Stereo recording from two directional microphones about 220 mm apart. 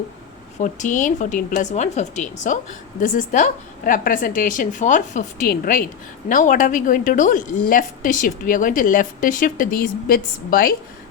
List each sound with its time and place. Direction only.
0.6 s a woman's voice: 35° left (ahead or behind)